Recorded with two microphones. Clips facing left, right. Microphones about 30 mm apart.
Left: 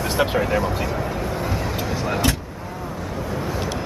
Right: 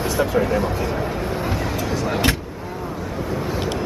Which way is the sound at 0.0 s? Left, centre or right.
Left.